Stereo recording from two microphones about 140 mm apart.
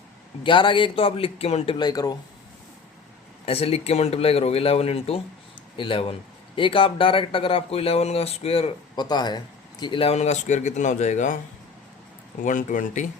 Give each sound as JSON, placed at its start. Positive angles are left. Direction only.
{"t": 0.4, "sound": "speech", "side_deg": 35}
{"t": 1.8, "sound": "speech", "side_deg": 30}
{"t": 3.4, "sound": "speech", "side_deg": 45}
{"t": 9.0, "sound": "speech", "side_deg": 30}
{"t": 12.4, "sound": "speech", "side_deg": 70}